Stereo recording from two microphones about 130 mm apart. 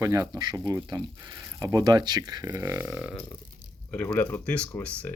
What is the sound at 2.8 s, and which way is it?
Speech, 5° right (ahead or behind).